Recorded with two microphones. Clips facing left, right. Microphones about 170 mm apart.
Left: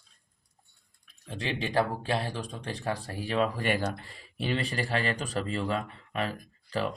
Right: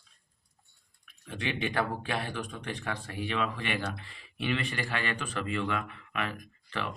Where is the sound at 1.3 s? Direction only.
35° left (ahead or behind).